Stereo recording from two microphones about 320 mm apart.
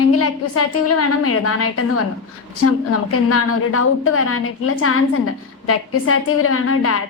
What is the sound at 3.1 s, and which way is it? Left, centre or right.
A woman's voice, left.